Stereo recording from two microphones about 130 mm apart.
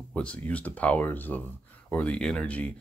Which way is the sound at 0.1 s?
10° left (ahead or behind).